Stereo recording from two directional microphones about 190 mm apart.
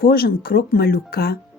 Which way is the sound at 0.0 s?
55° left (ahead or behind).